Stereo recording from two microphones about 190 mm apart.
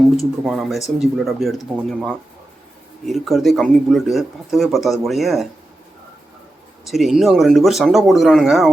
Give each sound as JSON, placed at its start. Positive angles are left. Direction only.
{"t": 0.0, "sound": "speech", "side_deg": 0}
{"t": 6.8, "sound": "speech", "side_deg": 0}